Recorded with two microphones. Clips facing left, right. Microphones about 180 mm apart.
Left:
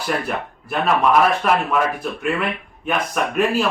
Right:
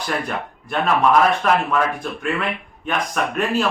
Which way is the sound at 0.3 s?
5° left (ahead or behind).